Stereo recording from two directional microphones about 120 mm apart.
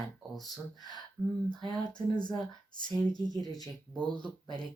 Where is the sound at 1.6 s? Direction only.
35° left (ahead or behind).